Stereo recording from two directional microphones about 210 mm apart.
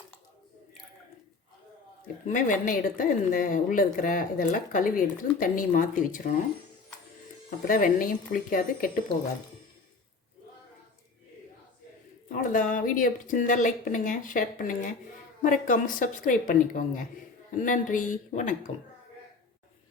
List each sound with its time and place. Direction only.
2.2 s a woman's voice: 40° left (ahead or behind)
7.7 s a woman's voice: 40° left (ahead or behind)
12.3 s a woman's voice: 40° left (ahead or behind)